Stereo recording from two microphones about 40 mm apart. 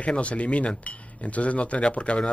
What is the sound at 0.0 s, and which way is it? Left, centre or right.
Speech, left.